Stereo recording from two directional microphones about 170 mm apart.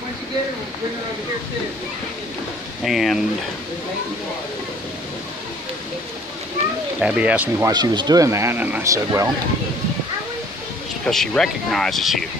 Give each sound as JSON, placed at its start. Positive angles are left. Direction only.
{"t": 2.8, "sound": "speech", "side_deg": 0}
{"t": 7.0, "sound": "speech", "side_deg": -5}
{"t": 7.7, "sound": "speech", "side_deg": -25}
{"t": 11.1, "sound": "speech", "side_deg": 0}